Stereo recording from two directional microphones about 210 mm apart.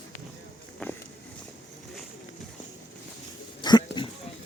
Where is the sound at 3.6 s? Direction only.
20° left (ahead or behind).